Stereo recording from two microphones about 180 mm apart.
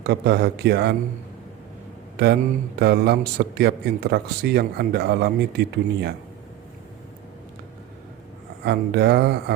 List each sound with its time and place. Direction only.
0.0 s a man's voice: 65° right (ahead or behind)
2.1 s a man's voice: 65° right (ahead or behind)
8.6 s a man's voice: 65° right (ahead or behind)